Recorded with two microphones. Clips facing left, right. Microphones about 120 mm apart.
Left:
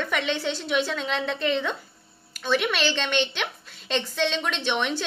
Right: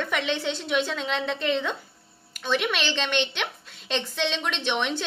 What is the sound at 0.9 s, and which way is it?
A woman's voice, 20° right (ahead or behind).